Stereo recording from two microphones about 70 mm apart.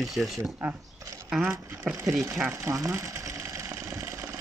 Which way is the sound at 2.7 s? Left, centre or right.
Right.